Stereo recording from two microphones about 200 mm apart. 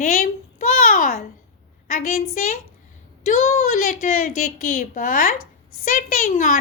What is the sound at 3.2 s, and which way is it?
A woman's voice, 35° left (ahead or behind).